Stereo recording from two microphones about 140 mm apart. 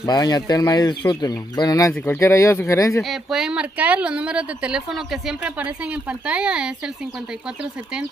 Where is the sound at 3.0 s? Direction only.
Centre (ahead or behind).